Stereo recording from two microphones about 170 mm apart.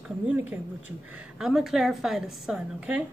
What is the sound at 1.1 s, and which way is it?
A woman's voice, centre (ahead or behind).